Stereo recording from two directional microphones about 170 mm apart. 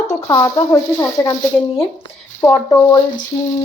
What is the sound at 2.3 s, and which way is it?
Speech, 20° left (ahead or behind).